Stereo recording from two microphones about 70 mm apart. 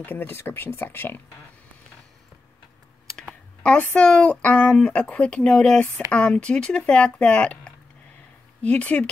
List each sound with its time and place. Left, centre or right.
0.0 s speech: left
3.6 s speech: centre